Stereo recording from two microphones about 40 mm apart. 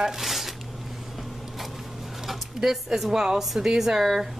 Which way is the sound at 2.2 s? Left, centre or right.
Centre.